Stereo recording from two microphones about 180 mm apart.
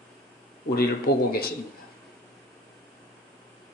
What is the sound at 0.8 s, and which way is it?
Speech, 55° left (ahead or behind).